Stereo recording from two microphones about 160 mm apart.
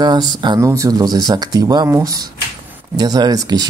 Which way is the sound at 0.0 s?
25° right (ahead or behind).